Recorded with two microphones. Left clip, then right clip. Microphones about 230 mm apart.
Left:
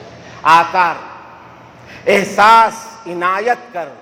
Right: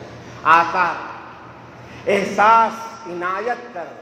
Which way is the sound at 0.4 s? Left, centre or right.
Left.